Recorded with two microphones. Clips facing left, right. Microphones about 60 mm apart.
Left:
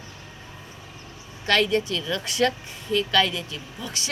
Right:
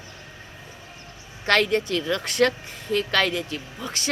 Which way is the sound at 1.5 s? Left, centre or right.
Right.